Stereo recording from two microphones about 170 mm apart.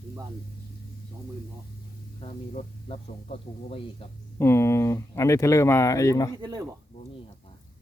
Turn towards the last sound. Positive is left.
turn(degrees=-25)  # may be behind; listen again after turning